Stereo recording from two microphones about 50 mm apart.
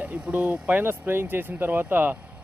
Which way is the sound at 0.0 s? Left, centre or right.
Right.